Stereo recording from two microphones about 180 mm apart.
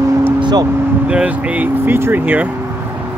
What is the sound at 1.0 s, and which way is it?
Speech, 5° right (ahead or behind).